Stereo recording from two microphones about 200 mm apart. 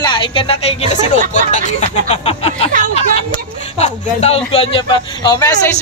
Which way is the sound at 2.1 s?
30° left (ahead or behind).